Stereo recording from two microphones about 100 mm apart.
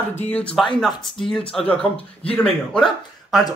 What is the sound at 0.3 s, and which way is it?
Speech, 15° left (ahead or behind).